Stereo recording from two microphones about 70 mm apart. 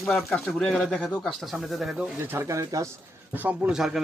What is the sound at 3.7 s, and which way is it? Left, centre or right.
Speech, centre.